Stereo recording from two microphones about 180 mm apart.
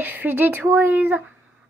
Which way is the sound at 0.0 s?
10° right (ahead or behind).